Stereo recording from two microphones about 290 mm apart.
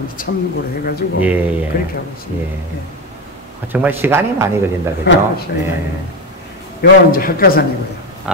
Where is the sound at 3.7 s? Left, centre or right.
Centre.